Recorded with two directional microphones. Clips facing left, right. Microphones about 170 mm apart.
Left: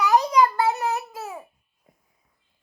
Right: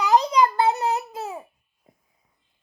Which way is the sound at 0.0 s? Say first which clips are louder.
Even; 20° right (ahead or behind).